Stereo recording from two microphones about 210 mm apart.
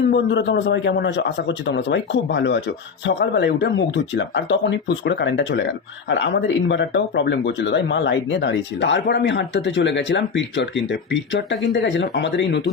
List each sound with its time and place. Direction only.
0.1 s speech: 60° left (ahead or behind)